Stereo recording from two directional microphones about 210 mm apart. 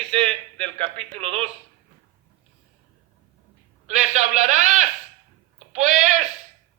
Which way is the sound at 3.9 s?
35° right (ahead or behind).